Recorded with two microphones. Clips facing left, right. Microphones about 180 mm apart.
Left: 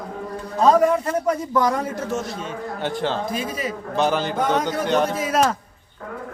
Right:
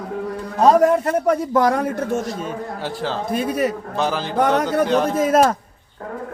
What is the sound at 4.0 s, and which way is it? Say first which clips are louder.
Speech: left 2 dB; centre (ahead or behind).